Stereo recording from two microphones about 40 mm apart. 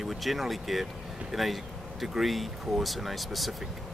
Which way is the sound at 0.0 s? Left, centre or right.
Centre.